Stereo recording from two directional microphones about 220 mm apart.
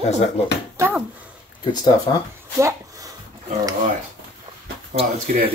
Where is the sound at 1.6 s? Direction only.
20° left (ahead or behind).